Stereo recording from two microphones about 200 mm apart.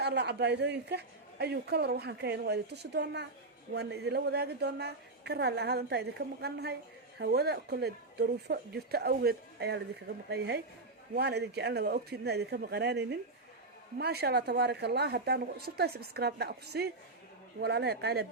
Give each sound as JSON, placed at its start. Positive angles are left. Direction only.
{"t": 0.0, "sound": "a man's voice", "side_deg": -55}